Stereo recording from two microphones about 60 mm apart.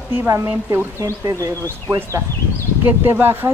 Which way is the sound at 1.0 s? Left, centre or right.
Right.